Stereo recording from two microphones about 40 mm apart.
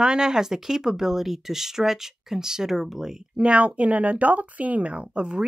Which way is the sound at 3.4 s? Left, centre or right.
Right.